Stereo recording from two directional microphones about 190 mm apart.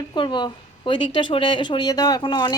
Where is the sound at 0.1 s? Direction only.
25° left (ahead or behind).